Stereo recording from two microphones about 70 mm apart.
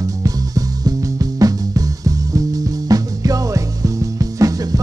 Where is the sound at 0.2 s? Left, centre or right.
Right.